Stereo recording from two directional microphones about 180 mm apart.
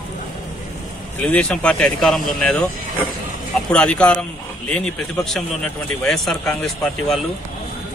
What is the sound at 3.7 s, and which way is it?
A man's voice, 5° left (ahead or behind).